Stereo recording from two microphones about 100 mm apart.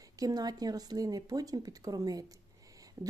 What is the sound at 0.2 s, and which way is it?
A woman's voice, 40° right (ahead or behind).